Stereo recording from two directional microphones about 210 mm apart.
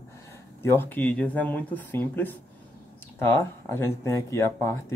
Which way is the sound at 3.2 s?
10° left (ahead or behind).